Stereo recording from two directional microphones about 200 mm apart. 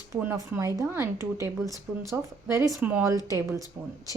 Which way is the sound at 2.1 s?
10° right (ahead or behind).